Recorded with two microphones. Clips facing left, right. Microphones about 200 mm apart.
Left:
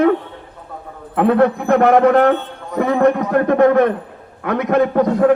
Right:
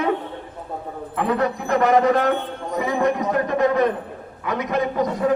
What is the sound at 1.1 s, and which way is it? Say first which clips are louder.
A man's voice: left 8 dB; 60° left (ahead or behind).